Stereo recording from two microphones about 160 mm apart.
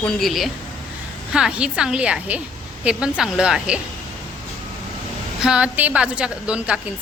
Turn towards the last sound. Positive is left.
turn(degrees=-5)  # may be behind; listen again after turning